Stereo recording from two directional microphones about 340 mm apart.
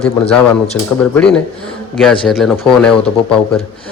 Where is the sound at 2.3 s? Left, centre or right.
Centre.